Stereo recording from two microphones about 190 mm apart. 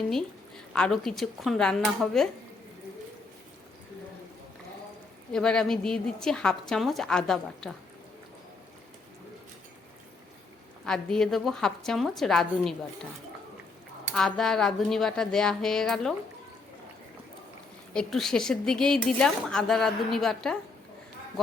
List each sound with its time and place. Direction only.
0.7 s speech: 5° left (ahead or behind)
5.3 s speech: 5° left (ahead or behind)
10.8 s speech: 5° left (ahead or behind)
14.1 s speech: centre (ahead or behind)
17.9 s speech: centre (ahead or behind)